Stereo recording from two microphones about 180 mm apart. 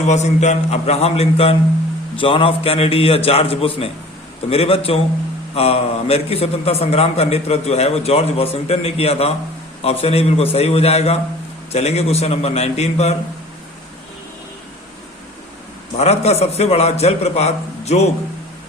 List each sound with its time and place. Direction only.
0.1 s a man's voice: 40° left (ahead or behind)
16.0 s a man's voice: 35° left (ahead or behind)